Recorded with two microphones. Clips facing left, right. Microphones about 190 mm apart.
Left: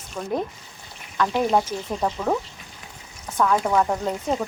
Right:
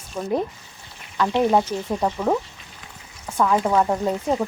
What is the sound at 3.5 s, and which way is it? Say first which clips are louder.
Speech: right 2 dB; 15° right (ahead or behind).